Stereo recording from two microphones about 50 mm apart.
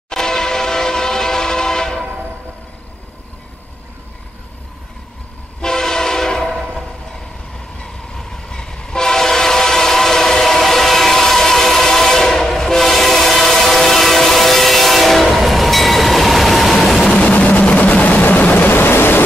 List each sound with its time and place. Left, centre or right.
0.1 s train: centre
5.6 s train: centre
17.1 s vehicle: left